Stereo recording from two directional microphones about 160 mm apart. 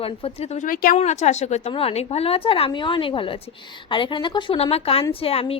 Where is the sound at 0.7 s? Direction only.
65° left (ahead or behind).